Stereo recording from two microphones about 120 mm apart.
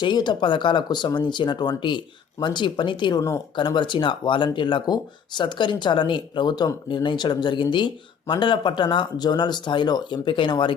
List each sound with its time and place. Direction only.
0.0 s speech: 40° left (ahead or behind)
3.2 s speech: 25° left (ahead or behind)
3.5 s speech: 40° left (ahead or behind)